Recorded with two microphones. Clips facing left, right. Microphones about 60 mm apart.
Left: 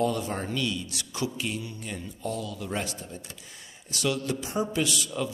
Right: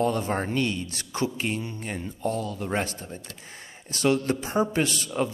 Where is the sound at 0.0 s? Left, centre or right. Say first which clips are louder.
Right 3 dB; right.